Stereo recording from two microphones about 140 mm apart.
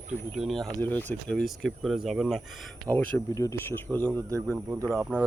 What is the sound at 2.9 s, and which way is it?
Speech, 10° left (ahead or behind).